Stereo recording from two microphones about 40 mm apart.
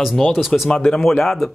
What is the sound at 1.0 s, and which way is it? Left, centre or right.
Speech, centre.